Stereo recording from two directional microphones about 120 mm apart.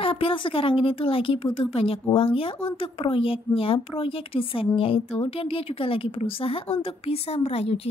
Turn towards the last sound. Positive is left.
turn(degrees=55)  # may be behind; listen again after turning